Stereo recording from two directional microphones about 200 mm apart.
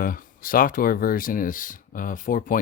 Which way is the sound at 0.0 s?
45° left (ahead or behind).